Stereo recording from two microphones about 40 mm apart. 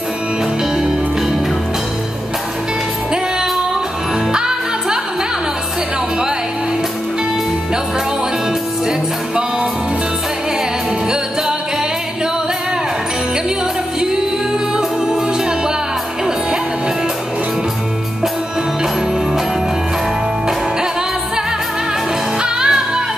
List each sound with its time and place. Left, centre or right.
4.3 s music: centre
22.4 s music: centre